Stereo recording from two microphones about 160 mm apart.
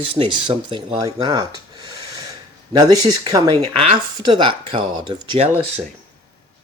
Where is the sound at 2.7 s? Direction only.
25° right (ahead or behind).